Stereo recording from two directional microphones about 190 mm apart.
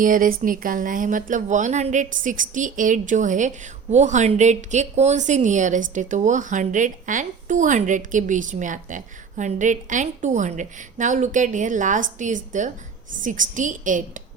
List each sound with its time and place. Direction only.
0.0 s a woman's voice: 45° right (ahead or behind)